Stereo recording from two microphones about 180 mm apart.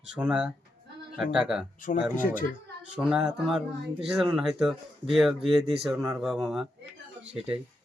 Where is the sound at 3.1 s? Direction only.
5° right (ahead or behind).